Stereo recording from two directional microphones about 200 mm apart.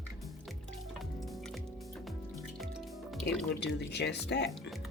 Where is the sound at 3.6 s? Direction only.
55° left (ahead or behind).